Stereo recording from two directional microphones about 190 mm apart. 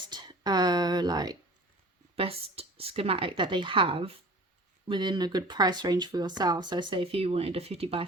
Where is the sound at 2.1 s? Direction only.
30° right (ahead or behind).